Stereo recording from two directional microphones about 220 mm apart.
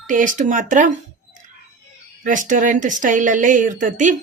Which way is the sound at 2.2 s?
35° right (ahead or behind).